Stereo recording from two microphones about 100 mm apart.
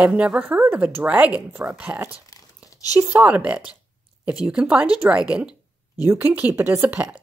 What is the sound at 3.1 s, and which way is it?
Speech, 10° right (ahead or behind).